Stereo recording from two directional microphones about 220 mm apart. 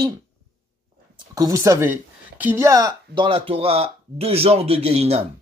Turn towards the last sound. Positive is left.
turn(degrees=-30)  # may be behind; listen again after turning